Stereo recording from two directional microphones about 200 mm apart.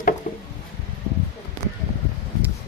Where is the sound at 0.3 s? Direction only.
40° left (ahead or behind).